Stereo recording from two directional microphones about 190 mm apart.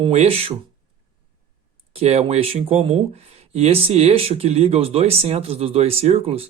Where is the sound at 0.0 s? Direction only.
35° right (ahead or behind).